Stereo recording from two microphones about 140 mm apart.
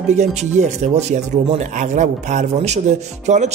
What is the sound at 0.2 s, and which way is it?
Speech, 55° right (ahead or behind).